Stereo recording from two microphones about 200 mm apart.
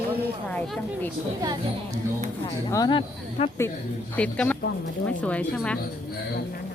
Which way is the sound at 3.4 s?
30° left (ahead or behind).